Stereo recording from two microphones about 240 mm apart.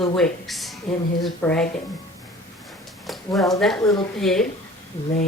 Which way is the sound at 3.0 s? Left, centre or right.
Centre.